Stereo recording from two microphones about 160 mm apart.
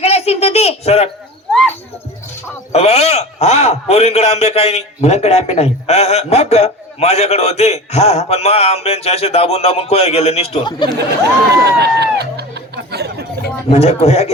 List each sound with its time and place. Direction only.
0.0 s a sound: 40° left (ahead or behind)
2.7 s a man's voice: 40° left (ahead or behind)
10.6 s speech: 30° left (ahead or behind)
11.5 s speech: 90° right
13.7 s a man's voice: 40° left (ahead or behind)